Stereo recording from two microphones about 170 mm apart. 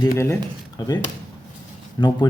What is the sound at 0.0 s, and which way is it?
Speech, 20° left (ahead or behind).